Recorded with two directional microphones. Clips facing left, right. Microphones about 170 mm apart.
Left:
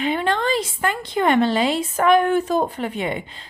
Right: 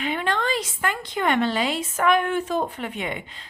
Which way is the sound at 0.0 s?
30° left (ahead or behind).